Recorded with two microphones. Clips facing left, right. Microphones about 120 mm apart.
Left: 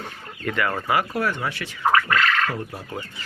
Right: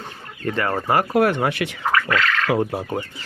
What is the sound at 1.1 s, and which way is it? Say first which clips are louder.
Speech: right 7 dB; 60° right (ahead or behind).